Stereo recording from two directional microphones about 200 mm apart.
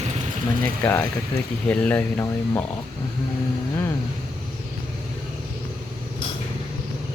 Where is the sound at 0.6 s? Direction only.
10° left (ahead or behind).